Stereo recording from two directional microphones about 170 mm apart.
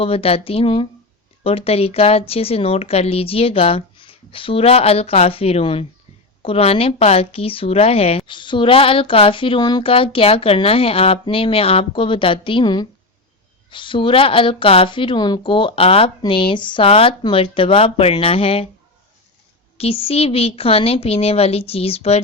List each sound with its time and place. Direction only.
0.0 s a woman's voice: 35° left (ahead or behind)
19.7 s a woman's voice: 35° left (ahead or behind)